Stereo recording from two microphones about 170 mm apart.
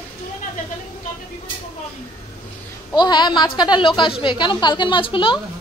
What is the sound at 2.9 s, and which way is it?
A woman's voice, 25° left (ahead or behind).